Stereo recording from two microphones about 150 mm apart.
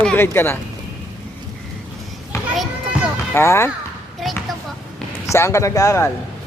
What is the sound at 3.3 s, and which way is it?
Speech, 15° left (ahead or behind).